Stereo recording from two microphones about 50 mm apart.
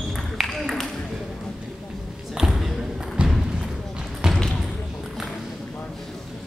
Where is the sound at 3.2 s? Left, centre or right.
Right.